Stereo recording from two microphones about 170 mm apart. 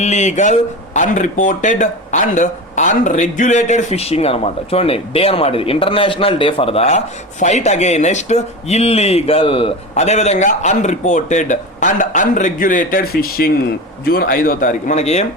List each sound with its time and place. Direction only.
0.0 s speech: 45° left (ahead or behind)